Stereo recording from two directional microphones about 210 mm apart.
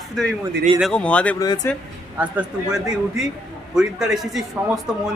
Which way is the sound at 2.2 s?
5° right (ahead or behind).